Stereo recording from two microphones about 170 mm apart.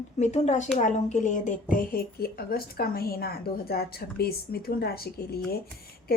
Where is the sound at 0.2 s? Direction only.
40° left (ahead or behind).